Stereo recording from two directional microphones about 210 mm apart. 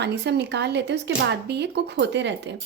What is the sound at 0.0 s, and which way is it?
A woman's voice, 50° right (ahead or behind).